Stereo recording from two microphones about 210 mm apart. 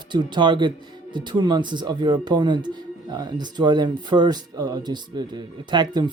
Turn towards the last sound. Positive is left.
turn(degrees=-20)  # may be behind; listen again after turning